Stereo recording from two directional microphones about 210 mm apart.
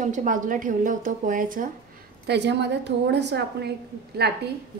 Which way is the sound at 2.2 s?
55° right (ahead or behind).